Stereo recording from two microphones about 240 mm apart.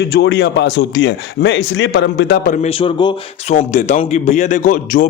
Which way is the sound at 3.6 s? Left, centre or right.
Left.